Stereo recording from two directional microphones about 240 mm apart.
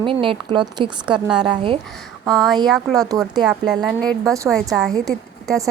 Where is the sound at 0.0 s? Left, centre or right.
Right.